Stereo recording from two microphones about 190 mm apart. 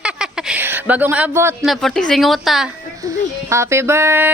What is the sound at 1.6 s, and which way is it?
A woman's voice, centre (ahead or behind).